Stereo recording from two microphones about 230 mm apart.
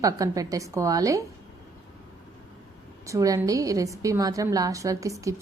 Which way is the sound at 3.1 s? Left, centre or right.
Centre.